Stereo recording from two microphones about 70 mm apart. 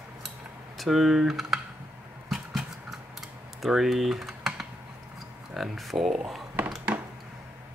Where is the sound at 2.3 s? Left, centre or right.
Centre.